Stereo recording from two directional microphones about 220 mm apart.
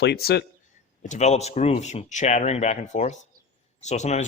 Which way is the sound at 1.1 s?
30° left (ahead or behind).